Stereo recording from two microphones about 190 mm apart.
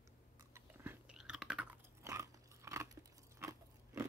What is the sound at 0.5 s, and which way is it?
Chewing, 10° right (ahead or behind).